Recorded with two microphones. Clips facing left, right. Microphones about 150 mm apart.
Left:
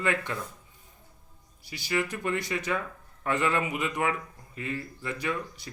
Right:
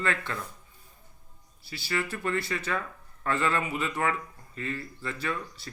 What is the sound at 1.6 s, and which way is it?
Speech, 15° left (ahead or behind).